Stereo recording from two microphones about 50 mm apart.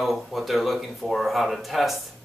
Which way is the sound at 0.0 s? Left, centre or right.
Centre.